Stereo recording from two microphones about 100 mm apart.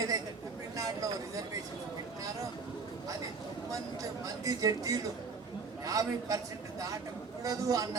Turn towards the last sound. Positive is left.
turn(degrees=-35)  # may be behind; listen again after turning